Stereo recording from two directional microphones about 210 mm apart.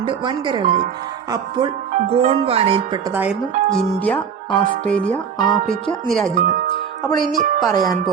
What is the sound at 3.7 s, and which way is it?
Speech, 5° left (ahead or behind).